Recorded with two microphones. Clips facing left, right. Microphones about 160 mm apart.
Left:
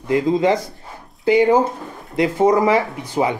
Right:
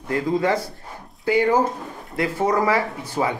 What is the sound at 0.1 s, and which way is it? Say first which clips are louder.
Speech: left 5 dB; 20° left (ahead or behind).